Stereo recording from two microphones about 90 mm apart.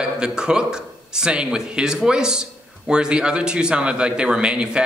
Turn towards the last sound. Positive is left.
turn(degrees=-10)  # may be behind; listen again after turning